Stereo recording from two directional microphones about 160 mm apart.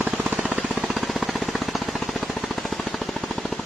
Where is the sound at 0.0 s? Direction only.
10° right (ahead or behind).